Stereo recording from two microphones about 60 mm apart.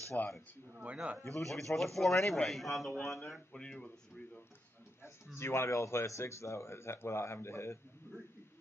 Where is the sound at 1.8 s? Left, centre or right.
Centre.